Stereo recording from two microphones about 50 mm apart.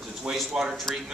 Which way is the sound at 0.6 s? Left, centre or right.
Centre.